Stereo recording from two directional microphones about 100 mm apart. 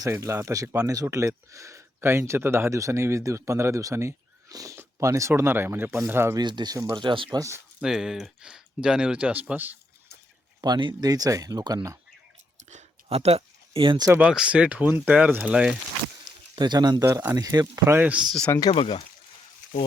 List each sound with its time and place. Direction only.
0.0 s speech: 30° right (ahead or behind)
6.3 s speech: 45° right (ahead or behind)
7.8 s speech: 5° right (ahead or behind)
10.6 s speech: 50° right (ahead or behind)
13.1 s speech: 90° right; by 14.0 s 60° right (ahead or behind)
14.2 s speech: 10° right (ahead or behind)
16.6 s speech: 45° right (ahead or behind)
17.1 s speech: 30° right (ahead or behind)
17.8 s speech: 20° right (ahead or behind)
18.7 s speech: 65° left (ahead or behind)